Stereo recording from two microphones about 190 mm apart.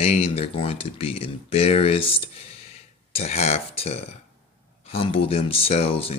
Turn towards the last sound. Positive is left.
turn(degrees=30)  # may be behind; listen again after turning